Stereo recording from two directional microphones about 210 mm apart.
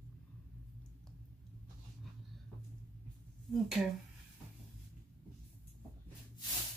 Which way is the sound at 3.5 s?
Centre (ahead or behind).